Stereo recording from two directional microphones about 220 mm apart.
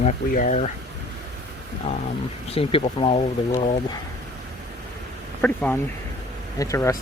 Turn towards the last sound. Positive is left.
turn(degrees=15)  # may be behind; listen again after turning